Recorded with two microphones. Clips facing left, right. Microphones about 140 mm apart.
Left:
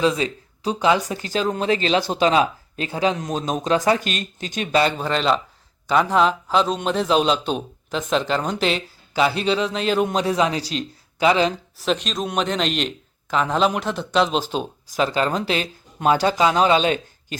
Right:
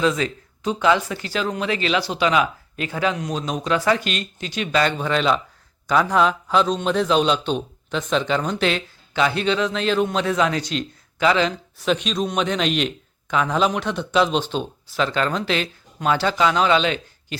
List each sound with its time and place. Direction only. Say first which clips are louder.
0.0 s a man's voice: left 1 dB; 30° left (ahead or behind)
2.0 s speech: left 2 dB; 45° left (ahead or behind)
2.2 s speech: left 1 dB; 30° left (ahead or behind)
3.2 s a man's voice: left 1 dB; 45° left (ahead or behind)
4.9 s speech: even; centre (ahead or behind)
9.4 s a man's voice: even; 35° left (ahead or behind)
11.8 s speech: right 2 dB; centre (ahead or behind)
14.9 s a man's voice: left 1 dB; 35° left (ahead or behind)